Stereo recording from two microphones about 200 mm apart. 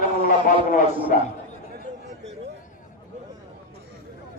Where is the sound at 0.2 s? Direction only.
40° left (ahead or behind).